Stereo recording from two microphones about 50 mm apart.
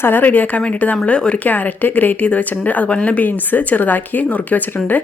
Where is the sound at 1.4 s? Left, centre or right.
Left.